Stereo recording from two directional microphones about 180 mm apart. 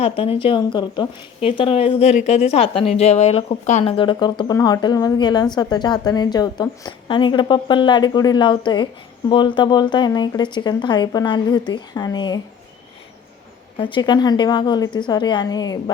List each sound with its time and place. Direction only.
0.0 s a woman's voice: 30° left (ahead or behind)
13.7 s a woman's voice: 25° left (ahead or behind)